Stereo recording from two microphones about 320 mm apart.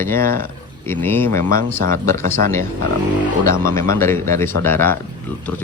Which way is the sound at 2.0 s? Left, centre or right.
Centre.